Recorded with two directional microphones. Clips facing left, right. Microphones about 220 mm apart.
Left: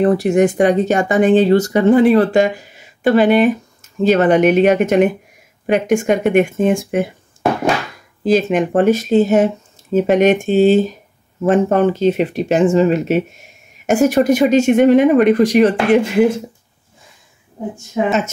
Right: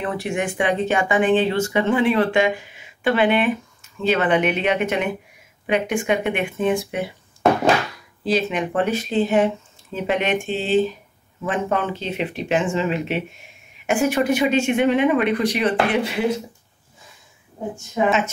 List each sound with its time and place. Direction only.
0.0 s speech: 40° left (ahead or behind)
8.2 s speech: 45° left (ahead or behind)